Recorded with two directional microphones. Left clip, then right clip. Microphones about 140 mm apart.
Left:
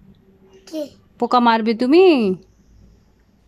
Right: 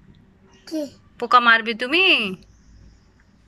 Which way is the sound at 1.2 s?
35° left (ahead or behind).